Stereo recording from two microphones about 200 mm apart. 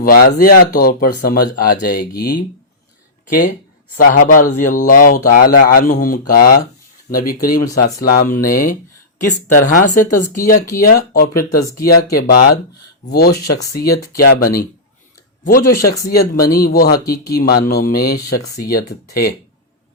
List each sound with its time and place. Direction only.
0.0 s speech: 45° left (ahead or behind)